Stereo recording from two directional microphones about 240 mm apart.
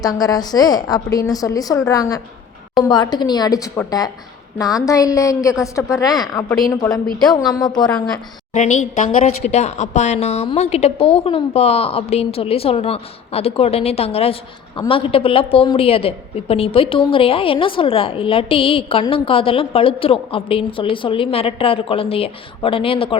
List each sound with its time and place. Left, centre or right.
0.0 s a woman's voice: centre
8.5 s a woman's voice: left